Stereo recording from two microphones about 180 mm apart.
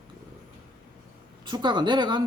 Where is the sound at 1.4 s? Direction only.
25° right (ahead or behind).